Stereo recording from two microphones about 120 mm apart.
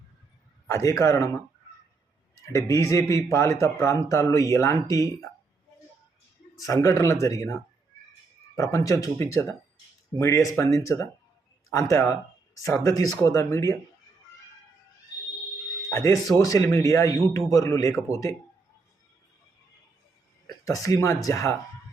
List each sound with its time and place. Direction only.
0.7 s speech: 25° left (ahead or behind)
2.4 s a man's voice: 25° left (ahead or behind)
6.6 s speech: 30° left (ahead or behind)
8.7 s speech: 30° left (ahead or behind)
15.9 s speech: 25° left (ahead or behind)
20.7 s speech: 25° left (ahead or behind)